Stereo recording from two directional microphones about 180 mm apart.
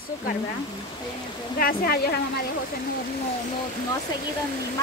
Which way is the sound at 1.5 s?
55° left (ahead or behind).